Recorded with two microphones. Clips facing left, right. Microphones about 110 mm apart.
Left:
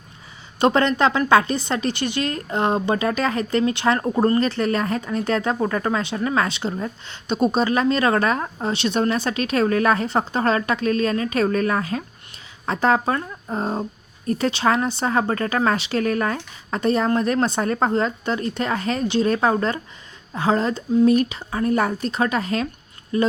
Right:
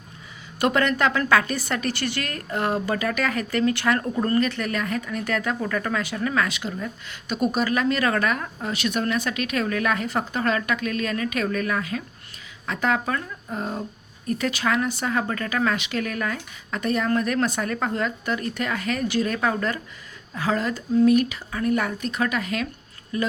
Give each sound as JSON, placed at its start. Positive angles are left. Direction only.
{"t": 0.6, "sound": "a woman's voice", "side_deg": 30}